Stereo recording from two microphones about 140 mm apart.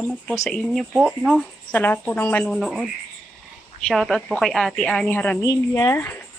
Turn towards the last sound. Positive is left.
turn(degrees=15)  # may be behind; listen again after turning